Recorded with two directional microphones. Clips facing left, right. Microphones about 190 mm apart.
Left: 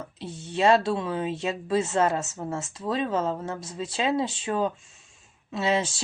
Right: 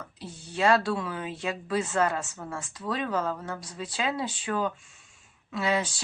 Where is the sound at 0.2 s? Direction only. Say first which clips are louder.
Left 3 dB; 25° left (ahead or behind).